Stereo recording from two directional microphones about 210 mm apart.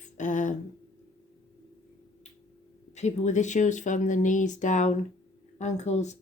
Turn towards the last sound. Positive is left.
turn(degrees=35)  # may be behind; listen again after turning